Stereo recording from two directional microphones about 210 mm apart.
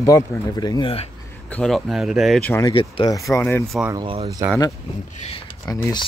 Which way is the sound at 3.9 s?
25° right (ahead or behind).